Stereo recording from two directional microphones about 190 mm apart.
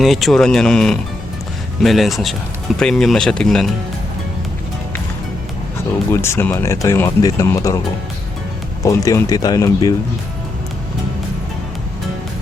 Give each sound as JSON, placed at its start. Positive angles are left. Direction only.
{"t": 0.0, "sound": "speech", "side_deg": 0}
{"t": 6.1, "sound": "speech", "side_deg": 15}
{"t": 8.8, "sound": "speech", "side_deg": 15}